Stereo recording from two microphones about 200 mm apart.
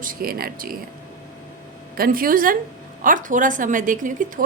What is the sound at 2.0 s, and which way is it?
A woman's voice, 45° right (ahead or behind).